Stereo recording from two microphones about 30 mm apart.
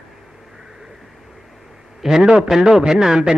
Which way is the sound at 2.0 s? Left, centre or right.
Centre.